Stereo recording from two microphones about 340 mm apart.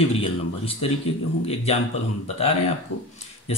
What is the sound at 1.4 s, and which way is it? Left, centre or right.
Speech, centre.